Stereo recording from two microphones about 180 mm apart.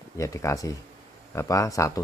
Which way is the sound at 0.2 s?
15° left (ahead or behind).